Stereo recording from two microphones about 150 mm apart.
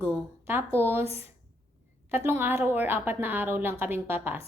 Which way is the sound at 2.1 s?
15° right (ahead or behind).